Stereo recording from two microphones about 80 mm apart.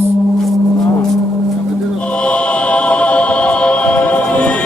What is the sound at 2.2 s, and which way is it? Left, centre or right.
Choir, centre.